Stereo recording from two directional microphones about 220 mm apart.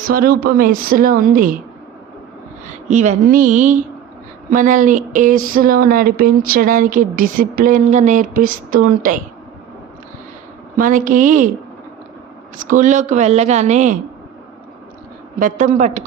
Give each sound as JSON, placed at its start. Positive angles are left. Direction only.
{"t": 0.0, "sound": "speech", "side_deg": -40}
{"t": 2.9, "sound": "speech", "side_deg": -35}
{"t": 10.8, "sound": "speech", "side_deg": -40}
{"t": 12.6, "sound": "speech", "side_deg": -35}
{"t": 15.4, "sound": "speech", "side_deg": -35}